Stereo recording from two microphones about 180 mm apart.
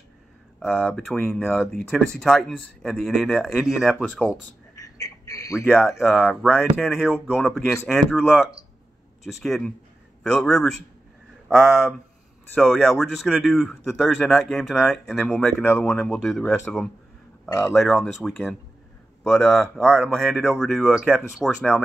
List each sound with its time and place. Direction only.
0.6 s speech: 10° left (ahead or behind)
4.2 s a sound: 15° left (ahead or behind)
5.7 s speech: centre (ahead or behind)
12.5 s speech: centre (ahead or behind)
17.5 s speech: 15° left (ahead or behind)
17.8 s speech: centre (ahead or behind)